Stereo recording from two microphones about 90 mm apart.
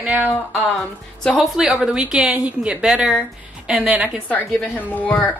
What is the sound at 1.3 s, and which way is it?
A woman's voice, 5° right (ahead or behind).